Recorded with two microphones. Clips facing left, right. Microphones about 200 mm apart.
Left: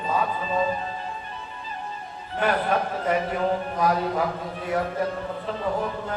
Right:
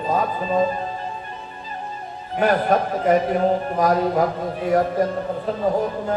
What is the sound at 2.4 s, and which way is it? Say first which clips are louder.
Speech: right 5 dB; 40° right (ahead or behind).